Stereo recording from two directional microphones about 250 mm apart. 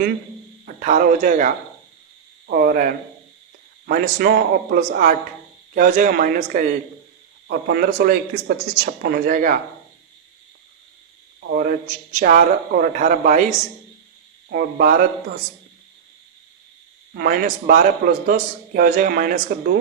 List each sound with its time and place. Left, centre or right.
0.6 s a man's voice: right
11.3 s a man's voice: right
14.5 s a man's voice: right
17.2 s a man's voice: right